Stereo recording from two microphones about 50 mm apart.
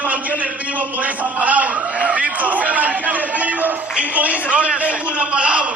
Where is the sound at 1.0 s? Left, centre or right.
Right.